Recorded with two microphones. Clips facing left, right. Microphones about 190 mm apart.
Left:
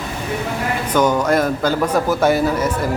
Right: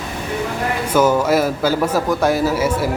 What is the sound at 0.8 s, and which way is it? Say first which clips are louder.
Speech: right 1 dB; 5° right (ahead or behind).